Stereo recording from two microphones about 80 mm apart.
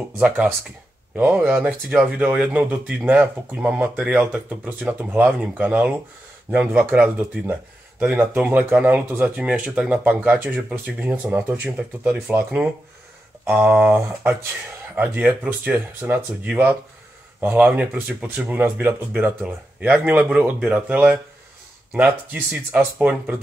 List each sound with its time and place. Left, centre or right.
1.1 s speech: centre
13.5 s speech: centre
22.3 s speech: centre